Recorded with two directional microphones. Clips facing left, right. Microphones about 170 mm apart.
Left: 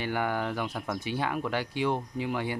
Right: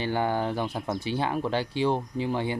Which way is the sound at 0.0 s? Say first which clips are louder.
Right 3 dB; 30° right (ahead or behind).